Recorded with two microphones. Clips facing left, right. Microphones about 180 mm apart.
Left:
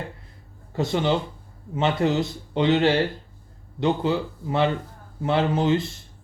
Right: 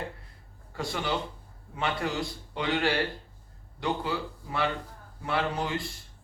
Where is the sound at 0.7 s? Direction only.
25° left (ahead or behind).